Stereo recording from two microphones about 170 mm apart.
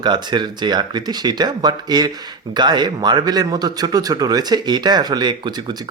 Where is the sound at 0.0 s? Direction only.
25° right (ahead or behind).